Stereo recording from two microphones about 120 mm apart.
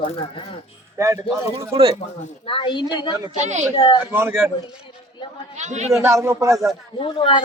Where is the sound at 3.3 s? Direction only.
75° right (ahead or behind).